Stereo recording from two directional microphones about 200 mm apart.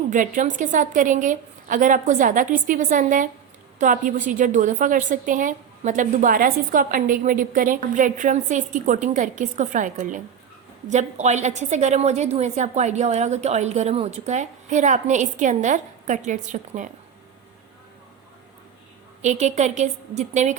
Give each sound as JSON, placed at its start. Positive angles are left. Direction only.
{"t": 0.1, "sound": "a woman's voice", "side_deg": -40}
{"t": 19.2, "sound": "a woman's voice", "side_deg": -35}